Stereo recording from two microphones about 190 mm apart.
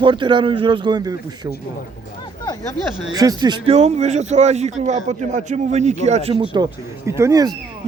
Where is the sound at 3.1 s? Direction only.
20° right (ahead or behind).